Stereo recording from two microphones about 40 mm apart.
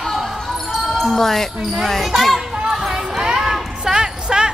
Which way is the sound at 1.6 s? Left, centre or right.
Centre.